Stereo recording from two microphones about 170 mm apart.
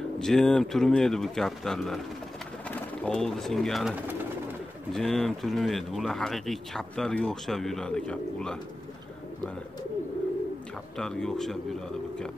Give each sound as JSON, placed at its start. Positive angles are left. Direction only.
{"t": 0.2, "sound": "speech", "side_deg": 5}
{"t": 11.0, "sound": "speech", "side_deg": 5}